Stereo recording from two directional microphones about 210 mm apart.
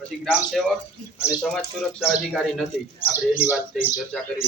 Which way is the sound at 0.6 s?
Centre (ahead or behind).